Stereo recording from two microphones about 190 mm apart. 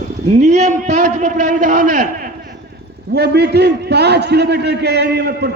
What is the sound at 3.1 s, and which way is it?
A man's voice, 60° right (ahead or behind).